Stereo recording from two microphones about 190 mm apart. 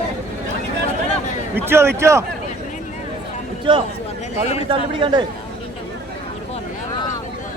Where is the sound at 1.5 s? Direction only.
15° right (ahead or behind).